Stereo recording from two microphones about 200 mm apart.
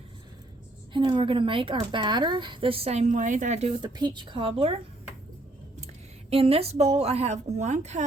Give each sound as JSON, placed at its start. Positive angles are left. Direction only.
{"t": 0.9, "sound": "speech", "side_deg": -25}
{"t": 6.3, "sound": "a woman's voice", "side_deg": -30}